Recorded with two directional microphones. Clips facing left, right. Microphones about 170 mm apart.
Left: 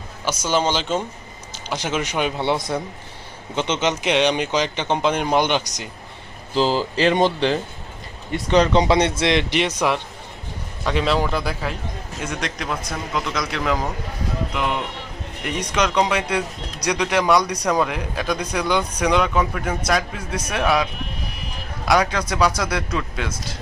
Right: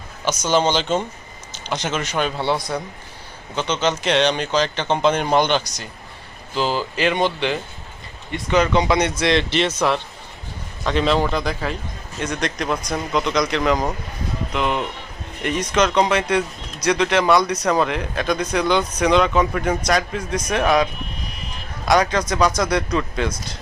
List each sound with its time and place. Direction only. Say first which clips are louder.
0.4 s speech: right 2 dB; 5° left (ahead or behind)
6.5 s speech: left 3 dB; 30° left (ahead or behind); by 20.8 s 5° left (ahead or behind)
21.8 s speech: right 2 dB; 5° left (ahead or behind)